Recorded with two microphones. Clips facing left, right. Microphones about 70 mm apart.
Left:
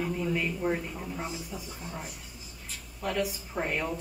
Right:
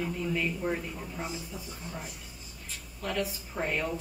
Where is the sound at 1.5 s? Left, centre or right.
Left.